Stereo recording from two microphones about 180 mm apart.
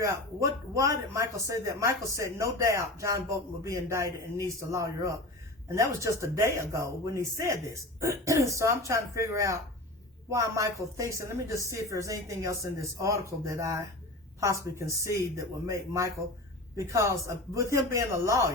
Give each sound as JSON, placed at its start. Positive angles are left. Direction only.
{"t": 0.0, "sound": "a man's voice", "side_deg": -15}